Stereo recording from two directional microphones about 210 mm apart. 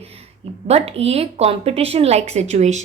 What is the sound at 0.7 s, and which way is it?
Speech, 30° right (ahead or behind).